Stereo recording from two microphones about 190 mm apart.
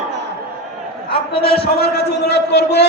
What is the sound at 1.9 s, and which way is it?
Speech, 60° left (ahead or behind).